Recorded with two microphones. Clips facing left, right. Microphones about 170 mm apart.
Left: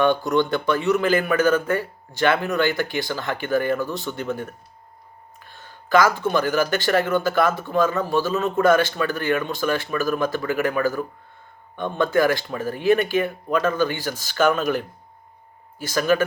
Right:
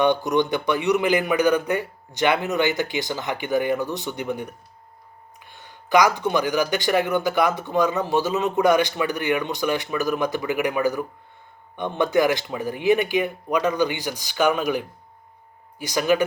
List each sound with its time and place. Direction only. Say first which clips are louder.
0.0 s speech: even; 20° right (ahead or behind)